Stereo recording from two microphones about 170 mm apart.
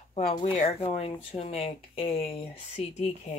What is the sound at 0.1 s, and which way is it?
Speech, 35° left (ahead or behind).